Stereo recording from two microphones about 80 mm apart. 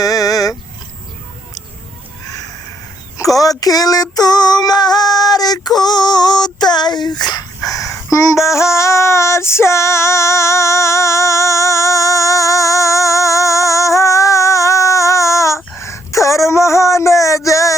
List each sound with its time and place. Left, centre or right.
0.0 s vehicle: left
3.3 s female singing: left
5.6 s a sound: left
7.7 s female singing: left